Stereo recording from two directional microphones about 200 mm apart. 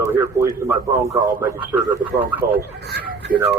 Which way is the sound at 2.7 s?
55° right (ahead or behind).